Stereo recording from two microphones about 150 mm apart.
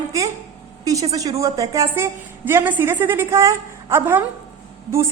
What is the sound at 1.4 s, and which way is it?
A woman's voice, 20° right (ahead or behind).